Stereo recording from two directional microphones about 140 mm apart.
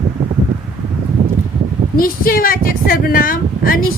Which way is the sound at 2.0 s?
90° left.